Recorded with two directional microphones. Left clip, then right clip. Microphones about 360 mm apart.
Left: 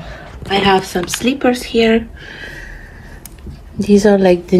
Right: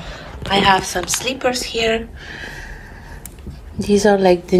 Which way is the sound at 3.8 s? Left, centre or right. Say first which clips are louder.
Left 3 dB; right.